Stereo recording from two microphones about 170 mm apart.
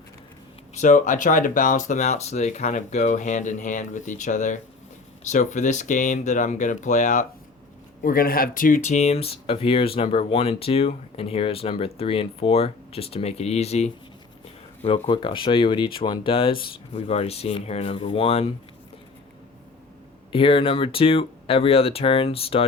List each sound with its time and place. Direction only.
0.7 s speech: 45° left (ahead or behind)
8.0 s speech: 60° left (ahead or behind); by 18.5 s 35° left (ahead or behind)
20.3 s speech: 30° left (ahead or behind)